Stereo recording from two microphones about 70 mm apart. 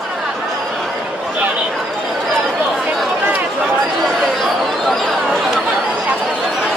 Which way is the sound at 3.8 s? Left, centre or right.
Centre.